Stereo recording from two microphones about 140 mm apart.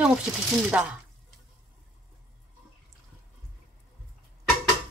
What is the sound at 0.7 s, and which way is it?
Speech, 10° right (ahead or behind).